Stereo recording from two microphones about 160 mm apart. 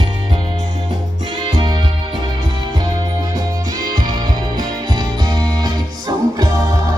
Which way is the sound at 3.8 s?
25° right (ahead or behind).